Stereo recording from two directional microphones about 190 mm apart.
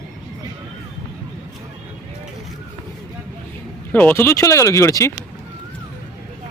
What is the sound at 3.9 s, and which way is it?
Speech, 10° left (ahead or behind).